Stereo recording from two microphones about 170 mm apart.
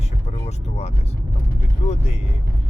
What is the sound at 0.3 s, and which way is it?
Vehicle, 40° left (ahead or behind).